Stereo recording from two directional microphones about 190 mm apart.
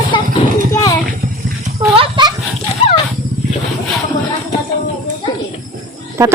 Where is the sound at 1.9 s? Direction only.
25° right (ahead or behind).